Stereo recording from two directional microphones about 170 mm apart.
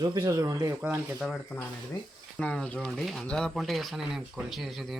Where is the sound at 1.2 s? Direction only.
5° left (ahead or behind).